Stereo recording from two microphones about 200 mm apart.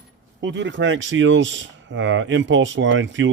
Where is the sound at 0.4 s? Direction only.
65° right (ahead or behind).